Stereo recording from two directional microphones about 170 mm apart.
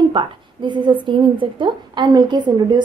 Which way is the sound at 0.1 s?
30° right (ahead or behind).